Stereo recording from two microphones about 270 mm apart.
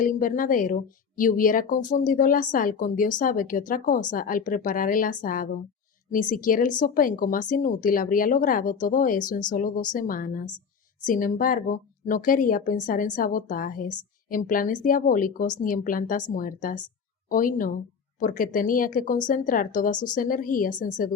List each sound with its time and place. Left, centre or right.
0.0 s a woman's voice: left